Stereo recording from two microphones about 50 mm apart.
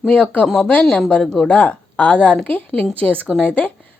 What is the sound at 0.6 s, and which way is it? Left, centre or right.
Speech, left.